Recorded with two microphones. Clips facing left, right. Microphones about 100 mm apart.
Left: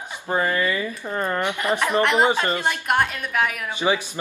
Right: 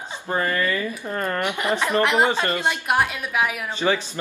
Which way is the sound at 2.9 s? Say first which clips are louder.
Left 1 dB; 5° right (ahead or behind).